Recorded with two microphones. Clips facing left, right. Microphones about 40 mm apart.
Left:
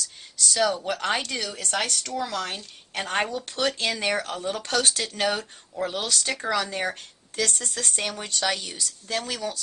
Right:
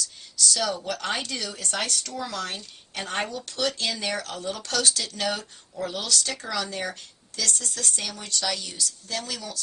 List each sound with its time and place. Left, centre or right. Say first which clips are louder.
0.5 s speech: left 6 dB; left
1.6 s speech: left 2 dB; centre
2.9 s speech: left 3 dB; left
3.3 s speech: left 2 dB; left